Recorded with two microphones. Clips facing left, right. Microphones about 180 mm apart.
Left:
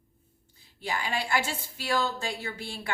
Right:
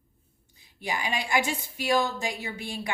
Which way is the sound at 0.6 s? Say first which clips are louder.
Right 1 dB; 15° right (ahead or behind).